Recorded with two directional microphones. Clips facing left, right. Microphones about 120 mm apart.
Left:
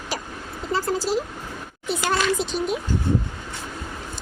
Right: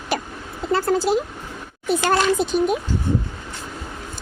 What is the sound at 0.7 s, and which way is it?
A woman's voice, 55° right (ahead or behind).